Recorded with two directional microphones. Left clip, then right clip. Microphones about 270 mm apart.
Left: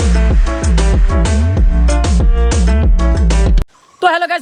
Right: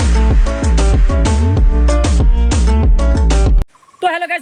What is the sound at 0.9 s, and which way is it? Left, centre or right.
Music, centre.